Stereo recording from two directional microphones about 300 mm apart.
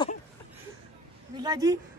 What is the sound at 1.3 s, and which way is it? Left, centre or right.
Speech, centre.